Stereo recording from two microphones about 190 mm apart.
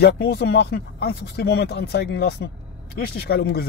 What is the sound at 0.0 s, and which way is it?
Speech, 60° left (ahead or behind).